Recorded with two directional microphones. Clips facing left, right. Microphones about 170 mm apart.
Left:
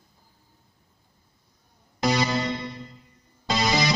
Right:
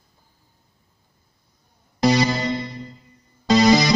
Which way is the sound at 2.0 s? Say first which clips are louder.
Right 5 dB; 35° right (ahead or behind).